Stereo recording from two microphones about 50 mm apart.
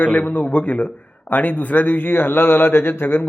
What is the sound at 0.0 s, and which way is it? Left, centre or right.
A man's voice, left.